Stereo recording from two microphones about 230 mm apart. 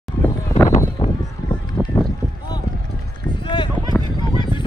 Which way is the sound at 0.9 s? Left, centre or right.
Centre.